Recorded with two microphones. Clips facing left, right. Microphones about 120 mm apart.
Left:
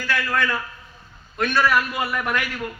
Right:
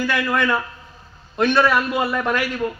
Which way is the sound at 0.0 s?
20° right (ahead or behind).